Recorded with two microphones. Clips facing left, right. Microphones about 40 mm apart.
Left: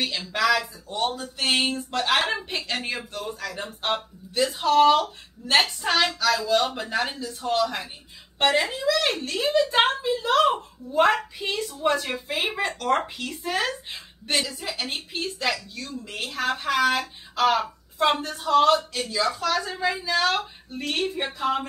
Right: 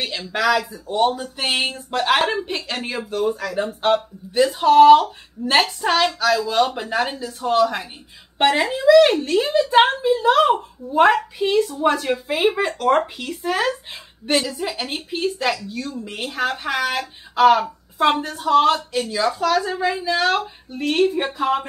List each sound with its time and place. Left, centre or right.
0.0 s a woman's voice: centre
2.2 s a woman's voice: centre
4.4 s a woman's voice: centre